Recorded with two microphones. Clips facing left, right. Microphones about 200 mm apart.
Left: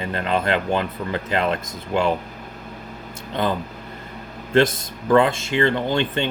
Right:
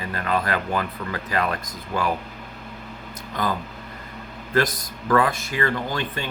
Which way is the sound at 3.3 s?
25° left (ahead or behind).